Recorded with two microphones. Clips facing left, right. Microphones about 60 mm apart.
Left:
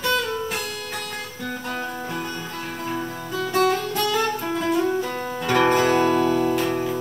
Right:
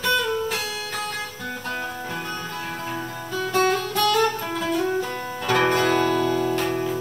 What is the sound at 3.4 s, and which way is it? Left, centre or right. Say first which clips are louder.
Music: left 1 dB; right.